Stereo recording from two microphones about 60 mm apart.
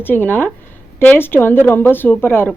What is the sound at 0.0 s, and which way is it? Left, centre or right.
Speech, left.